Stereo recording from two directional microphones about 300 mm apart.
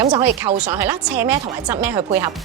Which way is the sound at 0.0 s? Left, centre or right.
Centre.